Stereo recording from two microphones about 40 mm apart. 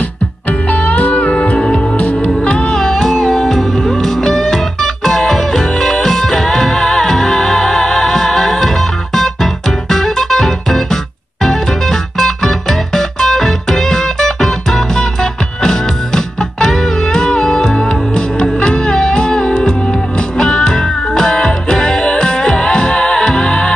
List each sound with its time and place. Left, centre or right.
0.5 s music: left
2.9 s music: centre